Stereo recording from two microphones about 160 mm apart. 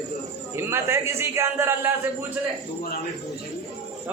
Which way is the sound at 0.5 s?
15° right (ahead or behind).